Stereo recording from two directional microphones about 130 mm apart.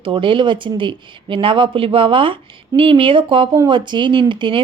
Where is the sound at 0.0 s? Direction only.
40° right (ahead or behind).